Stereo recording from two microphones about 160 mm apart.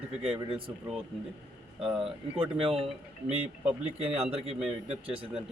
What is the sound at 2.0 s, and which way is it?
A man's voice, 35° right (ahead or behind).